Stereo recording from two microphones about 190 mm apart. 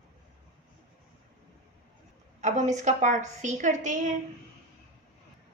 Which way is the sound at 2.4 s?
40° right (ahead or behind).